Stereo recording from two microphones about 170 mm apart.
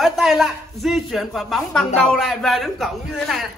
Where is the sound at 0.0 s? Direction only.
Centre (ahead or behind).